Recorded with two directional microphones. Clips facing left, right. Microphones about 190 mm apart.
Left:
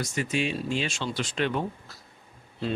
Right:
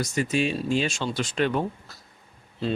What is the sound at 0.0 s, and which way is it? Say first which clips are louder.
Speech: right 3 dB; 40° right (ahead or behind).